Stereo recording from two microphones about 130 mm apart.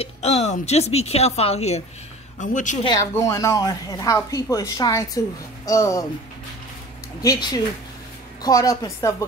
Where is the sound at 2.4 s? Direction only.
75° left (ahead or behind).